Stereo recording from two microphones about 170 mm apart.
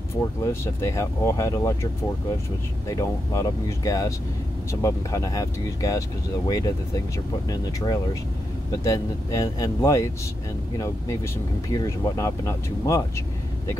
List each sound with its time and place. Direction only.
0.5 s speech: 15° left (ahead or behind)
2.9 s speech: 20° left (ahead or behind)
11.7 s speech: 20° left (ahead or behind)